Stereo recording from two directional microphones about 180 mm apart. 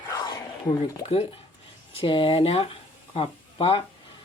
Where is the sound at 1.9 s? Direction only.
30° left (ahead or behind).